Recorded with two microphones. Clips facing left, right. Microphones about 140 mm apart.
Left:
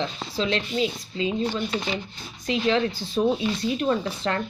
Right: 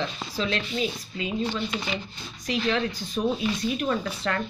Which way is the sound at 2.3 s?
30° left (ahead or behind).